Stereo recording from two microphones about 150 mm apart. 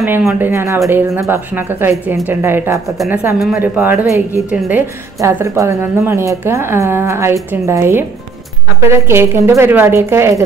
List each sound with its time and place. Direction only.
0.3 s a woman's voice: 15° right (ahead or behind)